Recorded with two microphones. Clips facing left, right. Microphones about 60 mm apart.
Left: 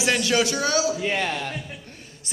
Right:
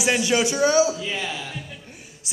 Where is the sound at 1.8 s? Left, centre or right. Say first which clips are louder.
Even; centre.